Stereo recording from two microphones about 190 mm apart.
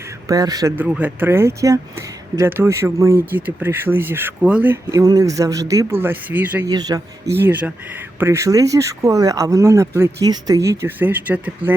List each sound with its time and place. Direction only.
0.3 s a man's voice: 20° right (ahead or behind)
0.8 s speech: 10° right (ahead or behind)
6.7 s speech: 20° right (ahead or behind)